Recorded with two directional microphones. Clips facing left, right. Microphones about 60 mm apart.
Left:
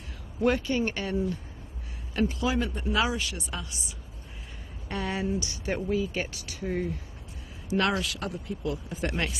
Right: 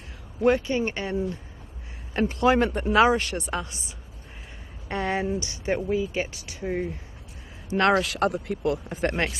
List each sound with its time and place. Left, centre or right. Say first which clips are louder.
0.4 s speech: right 3 dB; right
2.2 s speech: right 8 dB; right
2.9 s speech: right 9 dB; right
4.8 s speech: right 4 dB; right
7.9 s speech: right 8 dB; right
9.1 s speech: right 4 dB; right